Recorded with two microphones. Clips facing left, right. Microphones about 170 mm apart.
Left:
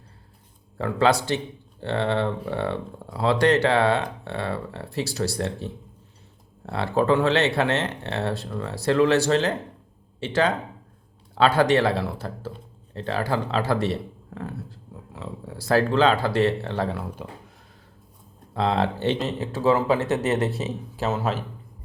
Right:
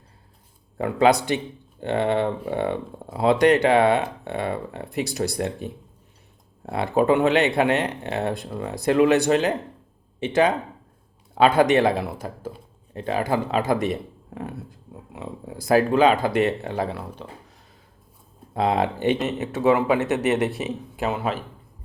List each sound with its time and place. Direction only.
0.8 s speech: 15° right (ahead or behind); by 17.2 s centre (ahead or behind)
18.5 s speech: 15° right (ahead or behind)